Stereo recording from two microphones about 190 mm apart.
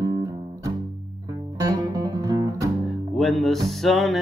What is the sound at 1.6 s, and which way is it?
Music, 20° right (ahead or behind).